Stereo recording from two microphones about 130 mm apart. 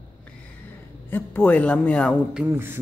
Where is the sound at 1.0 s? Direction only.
15° left (ahead or behind).